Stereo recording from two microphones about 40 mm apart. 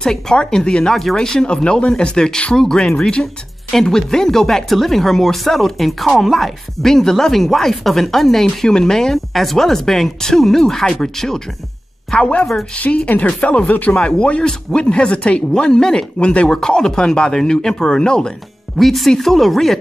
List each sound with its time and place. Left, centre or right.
0.0 s speech: centre
3.8 s speech: centre
9.1 s a woman's voice: centre; by 13.9 s left
13.9 s speech: left
16.4 s speech: centre
18.8 s speech: centre